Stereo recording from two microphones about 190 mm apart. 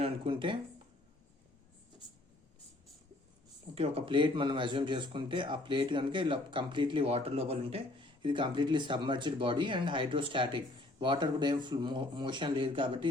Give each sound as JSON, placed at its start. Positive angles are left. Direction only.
{"t": 0.0, "sound": "speech", "side_deg": -25}
{"t": 3.8, "sound": "speech", "side_deg": -30}